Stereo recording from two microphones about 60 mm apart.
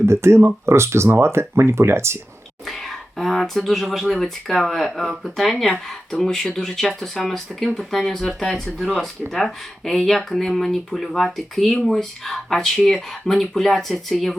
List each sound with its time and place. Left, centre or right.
0.0 s speech: right
3.2 s speech: centre